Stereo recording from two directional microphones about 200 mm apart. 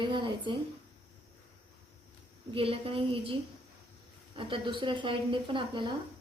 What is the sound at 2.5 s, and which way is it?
Speech, 25° right (ahead or behind).